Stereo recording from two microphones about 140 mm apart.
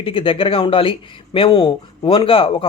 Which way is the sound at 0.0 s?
40° left (ahead or behind).